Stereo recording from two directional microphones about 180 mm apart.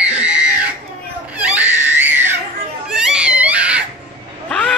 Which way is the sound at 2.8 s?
5° right (ahead or behind).